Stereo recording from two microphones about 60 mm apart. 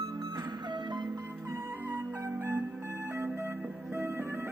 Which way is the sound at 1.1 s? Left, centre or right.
Right.